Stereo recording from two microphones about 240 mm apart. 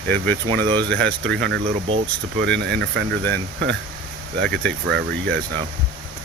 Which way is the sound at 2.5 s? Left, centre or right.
Right.